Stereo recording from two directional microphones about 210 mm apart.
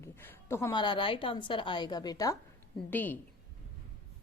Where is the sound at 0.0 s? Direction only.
10° left (ahead or behind).